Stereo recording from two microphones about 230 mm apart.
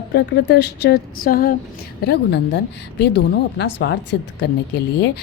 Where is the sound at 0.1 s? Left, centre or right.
Left.